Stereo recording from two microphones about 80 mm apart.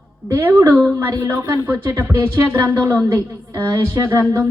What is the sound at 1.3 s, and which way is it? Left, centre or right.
A woman's voice, right.